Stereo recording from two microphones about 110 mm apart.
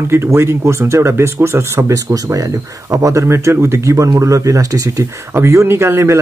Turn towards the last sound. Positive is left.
turn(degrees=-25)  # may be behind; listen again after turning